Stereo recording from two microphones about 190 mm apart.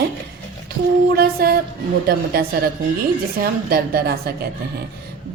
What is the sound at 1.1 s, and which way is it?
A woman's voice, 55° right (ahead or behind).